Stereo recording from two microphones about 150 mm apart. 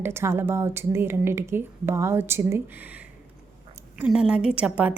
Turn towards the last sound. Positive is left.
turn(degrees=-10)  # may be behind; listen again after turning